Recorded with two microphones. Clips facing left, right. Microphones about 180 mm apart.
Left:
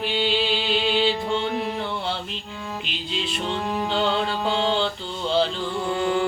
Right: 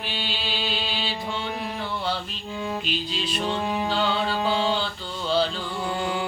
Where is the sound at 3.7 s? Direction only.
5° right (ahead or behind).